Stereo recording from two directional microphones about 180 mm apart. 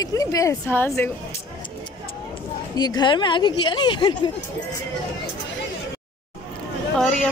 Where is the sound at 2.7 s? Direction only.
20° left (ahead or behind).